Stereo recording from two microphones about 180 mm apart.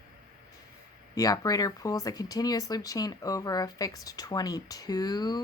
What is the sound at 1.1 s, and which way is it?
Speech, 20° left (ahead or behind).